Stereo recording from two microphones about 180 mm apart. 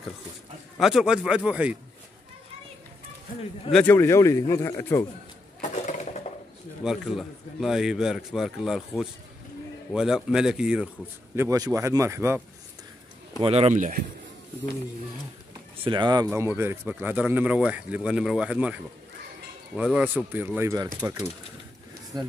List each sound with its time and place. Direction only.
0.7 s a man's voice: centre (ahead or behind)
3.7 s speech: 10° left (ahead or behind)
5.6 s a sound: 40° left (ahead or behind)
6.8 s a man's voice: centre (ahead or behind)
11.3 s speech: 20° right (ahead or behind)
13.4 s speech: 35° right (ahead or behind)
15.8 s speech: 25° right (ahead or behind)